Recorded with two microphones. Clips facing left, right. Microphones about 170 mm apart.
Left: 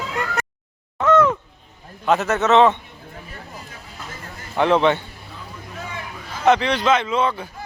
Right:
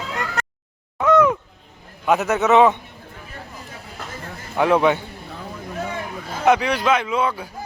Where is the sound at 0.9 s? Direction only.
10° right (ahead or behind).